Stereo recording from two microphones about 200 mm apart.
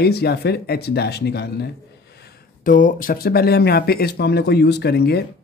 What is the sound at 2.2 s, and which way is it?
Speech, 40° left (ahead or behind).